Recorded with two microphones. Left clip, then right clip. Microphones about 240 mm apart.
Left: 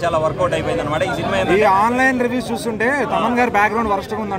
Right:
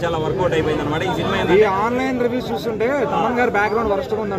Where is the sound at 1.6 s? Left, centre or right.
Left.